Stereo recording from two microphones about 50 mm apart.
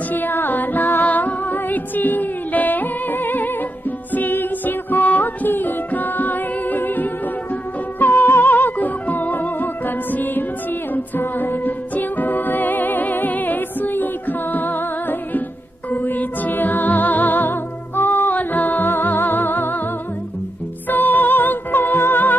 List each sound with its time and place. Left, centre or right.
0.1 s music: left
20.9 s music: left